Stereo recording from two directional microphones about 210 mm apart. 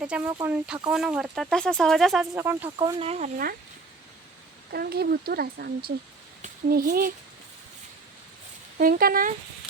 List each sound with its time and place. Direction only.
0.0 s speech: 5° right (ahead or behind)
2.7 s speech: 25° right (ahead or behind)
4.7 s a child's voice: 50° right (ahead or behind)
8.8 s speech: 45° right (ahead or behind)